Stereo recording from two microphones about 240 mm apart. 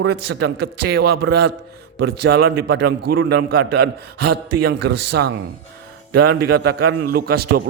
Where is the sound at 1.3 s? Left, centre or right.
Right.